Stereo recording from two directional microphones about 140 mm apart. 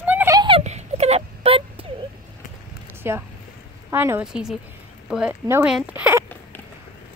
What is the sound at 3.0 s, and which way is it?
Speech, 15° right (ahead or behind).